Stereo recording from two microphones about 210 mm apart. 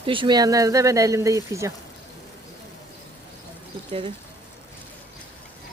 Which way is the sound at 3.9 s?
25° right (ahead or behind).